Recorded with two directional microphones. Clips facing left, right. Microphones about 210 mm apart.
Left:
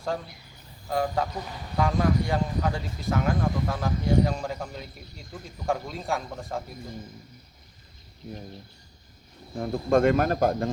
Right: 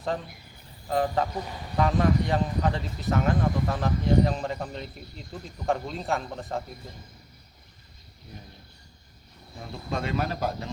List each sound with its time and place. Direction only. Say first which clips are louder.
0.9 s speech: right 1 dB; centre (ahead or behind)
9.6 s speech: left 11 dB; 50° left (ahead or behind)